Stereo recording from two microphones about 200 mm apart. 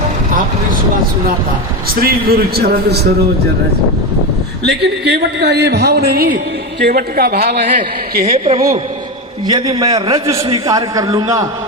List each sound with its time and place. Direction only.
2.0 s a man's voice: 50° right (ahead or behind)
4.6 s a man's voice: 55° right (ahead or behind)
8.4 s a man's voice: 35° right (ahead or behind)